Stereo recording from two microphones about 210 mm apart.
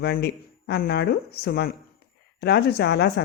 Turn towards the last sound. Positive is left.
turn(degrees=50)  # may be behind; listen again after turning